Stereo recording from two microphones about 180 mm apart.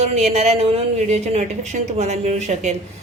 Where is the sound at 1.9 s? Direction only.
40° right (ahead or behind).